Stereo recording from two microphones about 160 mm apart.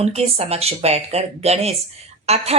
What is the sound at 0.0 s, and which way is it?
Speech, 40° right (ahead or behind).